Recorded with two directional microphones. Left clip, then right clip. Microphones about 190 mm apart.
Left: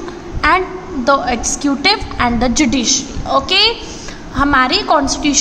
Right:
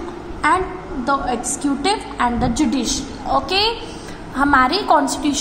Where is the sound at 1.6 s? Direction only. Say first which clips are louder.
Left 6 dB; 25° left (ahead or behind).